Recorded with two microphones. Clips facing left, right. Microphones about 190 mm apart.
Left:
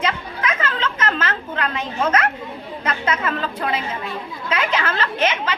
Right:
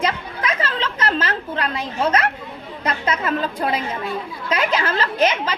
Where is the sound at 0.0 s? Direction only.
35° right (ahead or behind).